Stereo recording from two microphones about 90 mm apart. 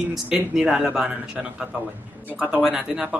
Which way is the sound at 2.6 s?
5° right (ahead or behind).